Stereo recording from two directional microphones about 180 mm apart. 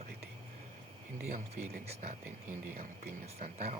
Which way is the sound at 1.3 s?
40° right (ahead or behind).